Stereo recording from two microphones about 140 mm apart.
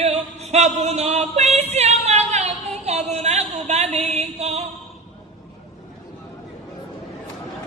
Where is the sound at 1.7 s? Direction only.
50° right (ahead or behind).